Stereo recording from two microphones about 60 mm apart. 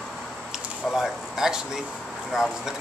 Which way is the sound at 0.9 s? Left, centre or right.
Centre.